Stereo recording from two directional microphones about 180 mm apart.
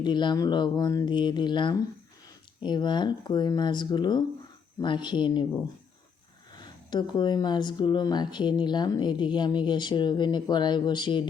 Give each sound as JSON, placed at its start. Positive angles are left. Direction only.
{"t": 0.0, "sound": "speech", "side_deg": 25}
{"t": 6.6, "sound": "speech", "side_deg": 25}